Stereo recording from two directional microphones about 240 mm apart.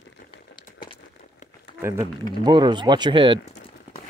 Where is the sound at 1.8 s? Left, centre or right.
Centre.